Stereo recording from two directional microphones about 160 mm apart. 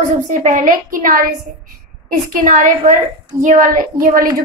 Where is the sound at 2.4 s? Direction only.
55° right (ahead or behind).